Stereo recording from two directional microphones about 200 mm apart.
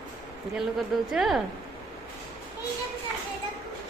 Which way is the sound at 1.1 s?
Centre (ahead or behind).